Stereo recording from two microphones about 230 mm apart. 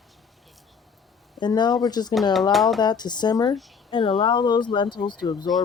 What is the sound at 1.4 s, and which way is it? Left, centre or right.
Speech, centre.